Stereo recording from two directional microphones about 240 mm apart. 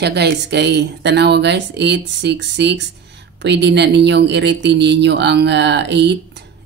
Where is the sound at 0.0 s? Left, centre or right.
Right.